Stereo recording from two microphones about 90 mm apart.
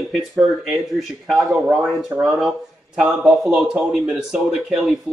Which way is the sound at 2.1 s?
25° right (ahead or behind).